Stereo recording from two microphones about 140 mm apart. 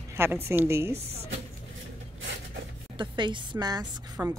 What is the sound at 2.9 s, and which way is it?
Speech, 35° right (ahead or behind).